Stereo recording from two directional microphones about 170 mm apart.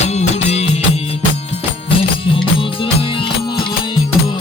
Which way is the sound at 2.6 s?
30° left (ahead or behind).